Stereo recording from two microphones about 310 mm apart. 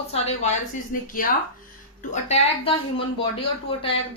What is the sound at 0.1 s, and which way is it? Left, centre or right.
Speech, centre.